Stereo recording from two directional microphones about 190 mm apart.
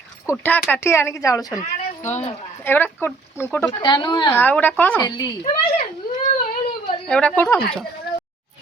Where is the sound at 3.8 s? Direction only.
25° left (ahead or behind).